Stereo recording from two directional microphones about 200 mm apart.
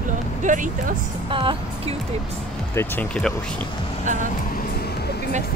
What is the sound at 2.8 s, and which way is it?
Speech, 10° left (ahead or behind).